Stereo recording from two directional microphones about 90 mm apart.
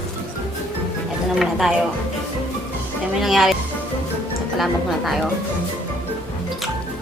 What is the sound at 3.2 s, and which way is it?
A woman's voice, centre (ahead or behind).